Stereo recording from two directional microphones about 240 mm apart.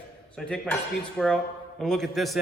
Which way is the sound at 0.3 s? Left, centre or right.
Centre.